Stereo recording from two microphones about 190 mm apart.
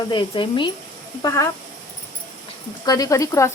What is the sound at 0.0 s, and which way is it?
Speech, 25° left (ahead or behind).